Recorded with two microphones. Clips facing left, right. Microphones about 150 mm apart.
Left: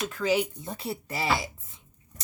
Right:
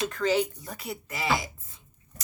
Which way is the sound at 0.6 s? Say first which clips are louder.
Left 3 dB; 25° left (ahead or behind).